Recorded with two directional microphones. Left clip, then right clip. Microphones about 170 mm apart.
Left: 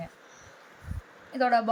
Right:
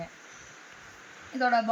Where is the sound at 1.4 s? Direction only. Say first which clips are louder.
Left 1 dB; 25° left (ahead or behind).